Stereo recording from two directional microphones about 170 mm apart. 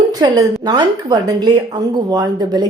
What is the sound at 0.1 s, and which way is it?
Speech, 25° right (ahead or behind).